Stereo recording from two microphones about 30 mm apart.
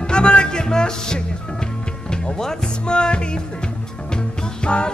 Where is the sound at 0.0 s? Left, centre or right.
Left.